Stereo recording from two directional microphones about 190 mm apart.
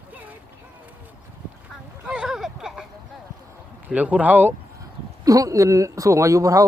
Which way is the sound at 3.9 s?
10° right (ahead or behind).